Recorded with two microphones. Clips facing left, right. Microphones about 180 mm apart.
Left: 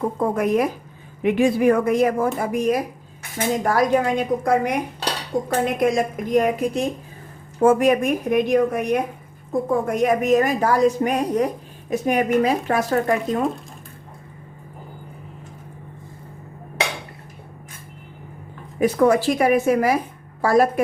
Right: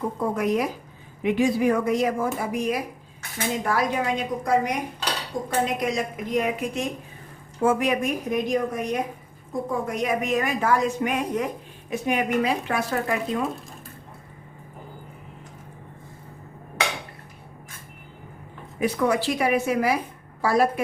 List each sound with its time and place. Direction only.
0.2 s speech: 55° left (ahead or behind)
9.5 s a woman's voice: 50° left (ahead or behind)
18.8 s speech: 45° left (ahead or behind)